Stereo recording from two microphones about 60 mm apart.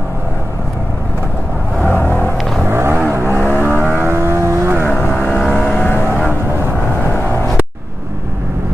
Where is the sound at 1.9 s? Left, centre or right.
Left.